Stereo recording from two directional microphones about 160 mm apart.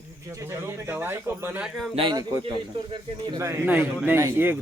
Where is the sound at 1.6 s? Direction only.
Centre (ahead or behind).